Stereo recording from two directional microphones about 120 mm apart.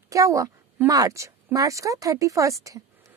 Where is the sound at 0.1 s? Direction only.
25° right (ahead or behind).